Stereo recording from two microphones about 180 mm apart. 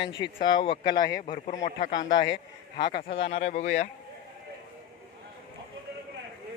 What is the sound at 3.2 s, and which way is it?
Speech, 35° left (ahead or behind).